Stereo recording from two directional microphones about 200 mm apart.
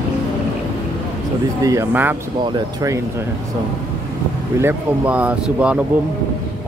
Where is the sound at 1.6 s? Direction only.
10° right (ahead or behind).